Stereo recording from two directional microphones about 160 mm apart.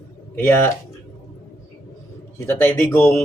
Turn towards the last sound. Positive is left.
turn(degrees=15)  # may be behind; listen again after turning